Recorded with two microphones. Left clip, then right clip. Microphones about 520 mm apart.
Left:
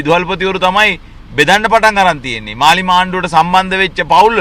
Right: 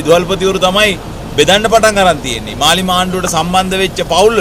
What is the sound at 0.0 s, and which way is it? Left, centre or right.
A man's voice, left.